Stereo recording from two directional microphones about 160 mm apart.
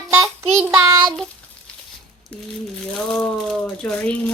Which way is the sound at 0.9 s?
25° right (ahead or behind).